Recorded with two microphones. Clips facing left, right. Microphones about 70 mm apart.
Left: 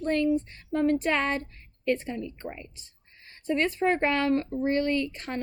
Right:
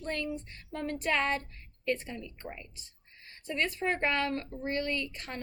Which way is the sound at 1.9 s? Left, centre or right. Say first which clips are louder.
Left 6 dB; left.